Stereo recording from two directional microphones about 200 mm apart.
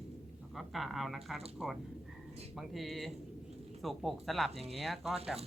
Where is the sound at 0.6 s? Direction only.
Centre (ahead or behind).